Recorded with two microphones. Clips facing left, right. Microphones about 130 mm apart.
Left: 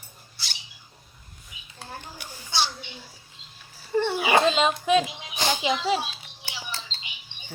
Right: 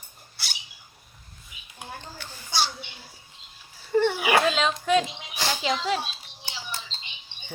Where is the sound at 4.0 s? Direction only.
15° left (ahead or behind).